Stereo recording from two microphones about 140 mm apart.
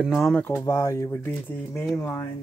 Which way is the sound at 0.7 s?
25° left (ahead or behind).